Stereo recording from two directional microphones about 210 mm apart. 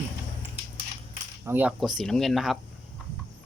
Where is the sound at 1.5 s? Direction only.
5° right (ahead or behind).